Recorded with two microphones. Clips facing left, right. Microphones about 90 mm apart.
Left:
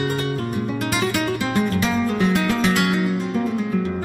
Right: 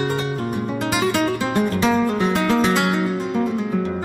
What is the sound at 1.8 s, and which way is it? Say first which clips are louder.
Music: right 2 dB; 25° right (ahead or behind).